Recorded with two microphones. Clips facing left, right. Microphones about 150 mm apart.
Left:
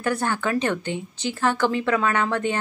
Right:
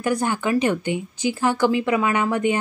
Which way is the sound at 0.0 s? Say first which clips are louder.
Right 2 dB; 10° right (ahead or behind).